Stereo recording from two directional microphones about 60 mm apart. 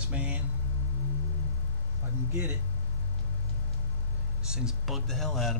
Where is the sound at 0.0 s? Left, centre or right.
Right.